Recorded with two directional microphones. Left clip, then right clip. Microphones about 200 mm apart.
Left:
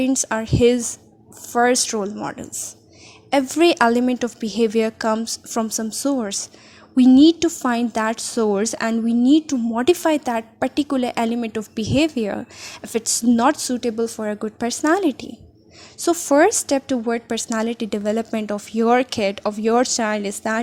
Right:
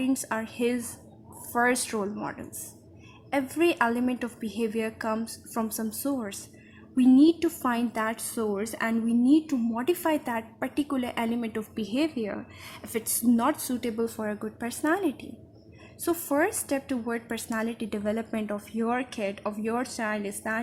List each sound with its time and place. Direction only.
0.1 s a woman's voice: 30° left (ahead or behind)
2.2 s a woman's voice: 35° left (ahead or behind)